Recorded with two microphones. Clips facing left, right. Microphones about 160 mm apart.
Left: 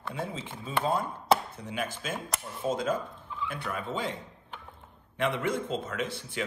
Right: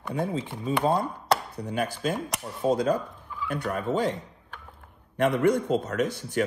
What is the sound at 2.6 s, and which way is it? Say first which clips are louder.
Speech: right 6 dB; 40° right (ahead or behind).